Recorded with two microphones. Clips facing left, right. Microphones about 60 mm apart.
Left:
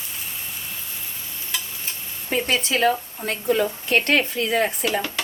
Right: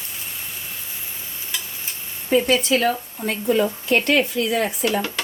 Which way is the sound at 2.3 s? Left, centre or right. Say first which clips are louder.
Right 5 dB; left.